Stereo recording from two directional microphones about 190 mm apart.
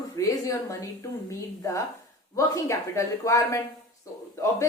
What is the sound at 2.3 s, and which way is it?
Speech, 15° left (ahead or behind).